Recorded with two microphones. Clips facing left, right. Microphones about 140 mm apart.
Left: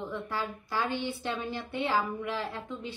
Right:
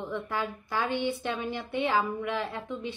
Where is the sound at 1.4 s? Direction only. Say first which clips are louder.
Right 3 dB; 20° right (ahead or behind).